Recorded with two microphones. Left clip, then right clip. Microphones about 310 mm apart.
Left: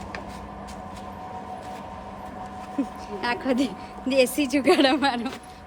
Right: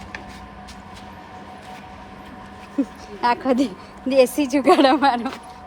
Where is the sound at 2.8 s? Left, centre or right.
Centre.